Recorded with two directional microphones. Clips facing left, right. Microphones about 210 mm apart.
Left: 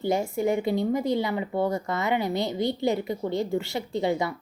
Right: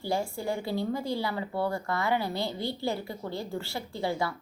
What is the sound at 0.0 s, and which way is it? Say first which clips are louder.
A woman's voice: left 6 dB; 20° left (ahead or behind).